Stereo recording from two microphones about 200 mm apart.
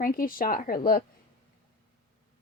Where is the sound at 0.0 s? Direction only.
45° left (ahead or behind).